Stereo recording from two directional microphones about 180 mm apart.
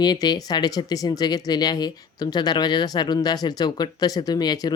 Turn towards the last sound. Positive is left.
turn(degrees=20)  # may be behind; listen again after turning